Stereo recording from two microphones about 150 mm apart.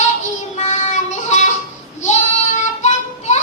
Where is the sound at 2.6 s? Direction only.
50° left (ahead or behind).